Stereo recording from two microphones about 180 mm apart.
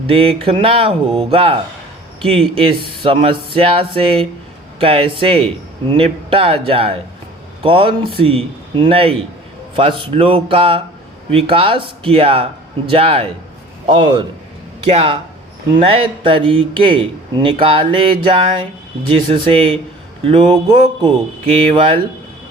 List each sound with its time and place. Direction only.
0.1 s speech: 30° right (ahead or behind)
2.6 s a man's voice: 30° right (ahead or behind)